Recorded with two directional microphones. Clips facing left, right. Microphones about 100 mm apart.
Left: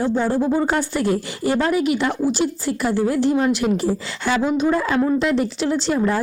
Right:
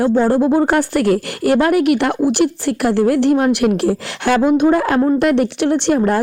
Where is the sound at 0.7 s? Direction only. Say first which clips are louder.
Right 5 dB; 65° right (ahead or behind).